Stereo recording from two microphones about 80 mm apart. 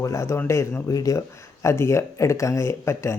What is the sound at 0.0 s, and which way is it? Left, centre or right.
Speech, left.